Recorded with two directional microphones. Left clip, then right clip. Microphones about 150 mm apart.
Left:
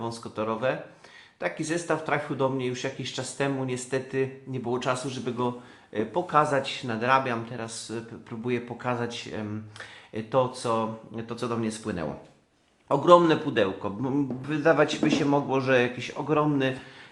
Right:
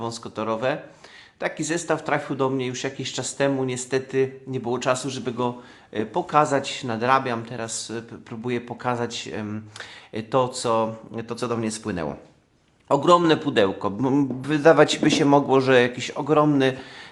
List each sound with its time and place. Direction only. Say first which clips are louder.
0.0 s a man's voice: right 3 dB; 40° right (ahead or behind)